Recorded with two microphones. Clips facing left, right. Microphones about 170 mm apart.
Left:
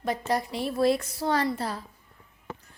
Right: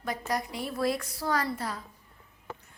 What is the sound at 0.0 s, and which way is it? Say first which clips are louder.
A woman's voice: left 4 dB; 25° left (ahead or behind).